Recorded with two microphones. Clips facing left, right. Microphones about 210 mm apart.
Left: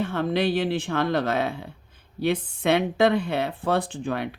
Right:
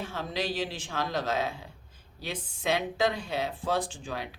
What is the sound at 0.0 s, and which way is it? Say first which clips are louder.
Speech: left 10 dB; 60° left (ahead or behind).